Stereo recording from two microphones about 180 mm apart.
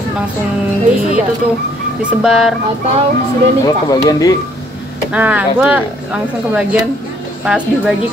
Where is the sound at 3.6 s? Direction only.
20° left (ahead or behind).